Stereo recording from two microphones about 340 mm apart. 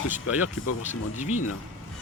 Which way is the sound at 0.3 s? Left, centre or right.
Left.